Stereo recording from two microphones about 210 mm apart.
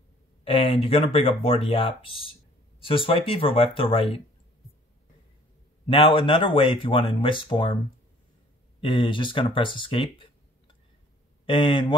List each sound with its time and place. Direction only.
0.4 s speech: 25° left (ahead or behind)
5.9 s speech: 25° left (ahead or behind)
8.8 s speech: 25° left (ahead or behind)
11.4 s speech: 25° left (ahead or behind)